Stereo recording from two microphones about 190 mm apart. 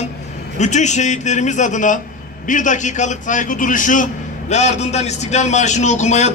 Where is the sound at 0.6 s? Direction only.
40° left (ahead or behind).